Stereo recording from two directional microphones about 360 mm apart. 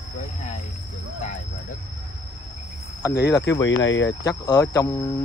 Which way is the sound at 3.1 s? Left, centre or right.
Left.